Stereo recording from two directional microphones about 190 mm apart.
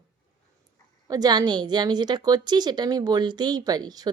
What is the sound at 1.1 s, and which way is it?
A woman's voice, 20° right (ahead or behind).